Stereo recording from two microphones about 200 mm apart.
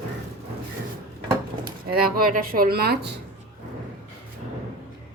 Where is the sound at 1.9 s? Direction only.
45° right (ahead or behind).